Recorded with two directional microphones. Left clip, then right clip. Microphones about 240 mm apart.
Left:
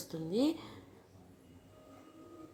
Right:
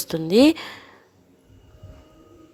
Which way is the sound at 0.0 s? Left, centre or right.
Right.